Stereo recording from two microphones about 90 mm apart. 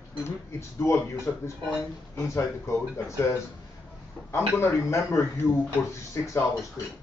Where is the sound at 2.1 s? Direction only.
35° left (ahead or behind).